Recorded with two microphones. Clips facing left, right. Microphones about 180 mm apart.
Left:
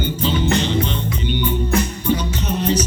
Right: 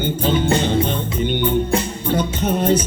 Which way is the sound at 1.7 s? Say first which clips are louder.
Even; 30° right (ahead or behind).